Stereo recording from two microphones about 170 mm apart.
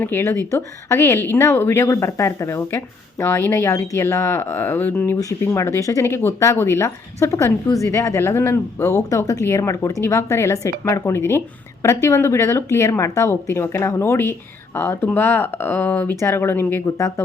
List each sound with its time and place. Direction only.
0.0 s speech: 15° left (ahead or behind)